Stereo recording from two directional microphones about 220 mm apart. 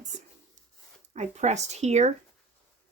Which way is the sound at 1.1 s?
30° right (ahead or behind).